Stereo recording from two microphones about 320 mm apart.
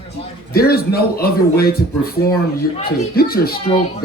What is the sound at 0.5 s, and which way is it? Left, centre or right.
A man's voice, left.